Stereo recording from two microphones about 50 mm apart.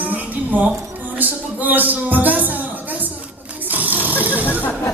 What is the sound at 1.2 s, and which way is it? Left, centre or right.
Music, right.